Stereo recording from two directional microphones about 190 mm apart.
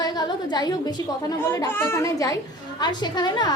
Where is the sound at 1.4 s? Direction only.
10° left (ahead or behind).